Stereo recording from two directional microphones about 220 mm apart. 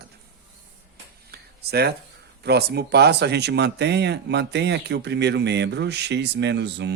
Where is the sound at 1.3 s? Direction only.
45° right (ahead or behind).